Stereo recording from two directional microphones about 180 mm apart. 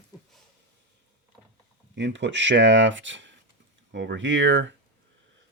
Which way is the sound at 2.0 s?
85° right.